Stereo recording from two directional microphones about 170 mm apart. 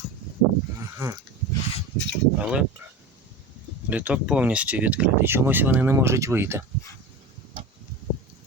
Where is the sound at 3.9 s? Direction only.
10° right (ahead or behind).